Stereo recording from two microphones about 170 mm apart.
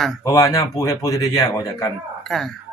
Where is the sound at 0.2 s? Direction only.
20° left (ahead or behind).